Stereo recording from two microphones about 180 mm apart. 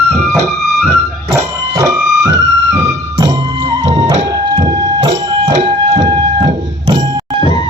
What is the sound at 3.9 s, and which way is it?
Music, 40° right (ahead or behind).